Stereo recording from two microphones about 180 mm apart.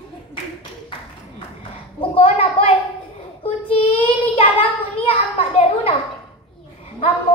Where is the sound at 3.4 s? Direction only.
30° left (ahead or behind).